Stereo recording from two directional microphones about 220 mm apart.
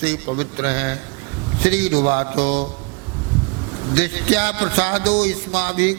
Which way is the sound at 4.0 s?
10° right (ahead or behind).